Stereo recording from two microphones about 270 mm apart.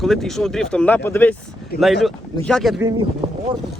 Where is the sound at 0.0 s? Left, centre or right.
Centre.